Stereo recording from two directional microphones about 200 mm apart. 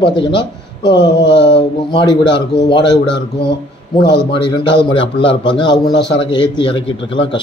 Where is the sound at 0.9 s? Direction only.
60° left (ahead or behind).